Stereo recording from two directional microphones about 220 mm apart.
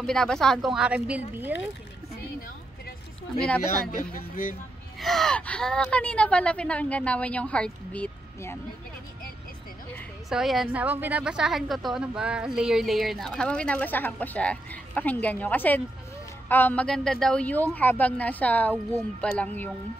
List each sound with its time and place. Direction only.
0.0 s a woman's voice: 5° left (ahead or behind)
3.4 s a woman's voice: 5° left (ahead or behind)
3.9 s speech: 40° left (ahead or behind)
4.9 s a woman's voice: centre (ahead or behind)
10.3 s a woman's voice: centre (ahead or behind)